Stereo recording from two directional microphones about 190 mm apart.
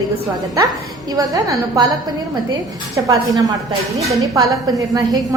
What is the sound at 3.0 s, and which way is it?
A woman's voice, 20° right (ahead or behind).